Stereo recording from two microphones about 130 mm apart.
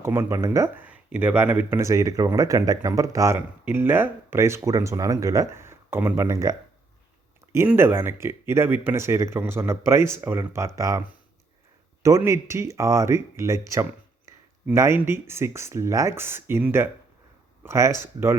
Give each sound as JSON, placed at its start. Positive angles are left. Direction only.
{"t": 0.0, "sound": "speech", "side_deg": -20}
{"t": 7.7, "sound": "speech", "side_deg": -15}
{"t": 12.0, "sound": "speech", "side_deg": -20}